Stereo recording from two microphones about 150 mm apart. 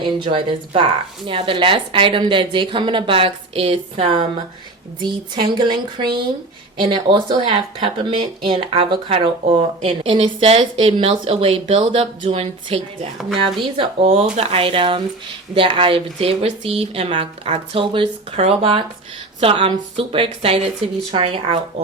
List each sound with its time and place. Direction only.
0.0 s speech: 35° right (ahead or behind)